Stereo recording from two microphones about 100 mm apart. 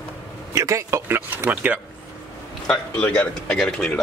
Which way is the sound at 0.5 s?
30° right (ahead or behind).